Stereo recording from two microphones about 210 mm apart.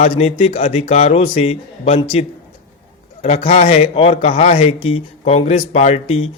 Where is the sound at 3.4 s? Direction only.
30° left (ahead or behind).